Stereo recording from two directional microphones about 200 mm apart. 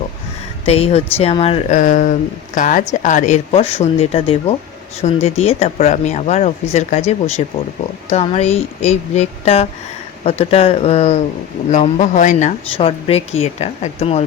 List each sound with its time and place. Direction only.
0.6 s speech: 30° left (ahead or behind)
1.8 s speech: 40° left (ahead or behind)
12.7 s speech: 30° left (ahead or behind)